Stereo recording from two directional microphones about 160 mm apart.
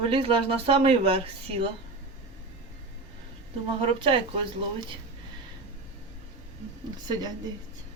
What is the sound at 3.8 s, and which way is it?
Speech, 35° right (ahead or behind).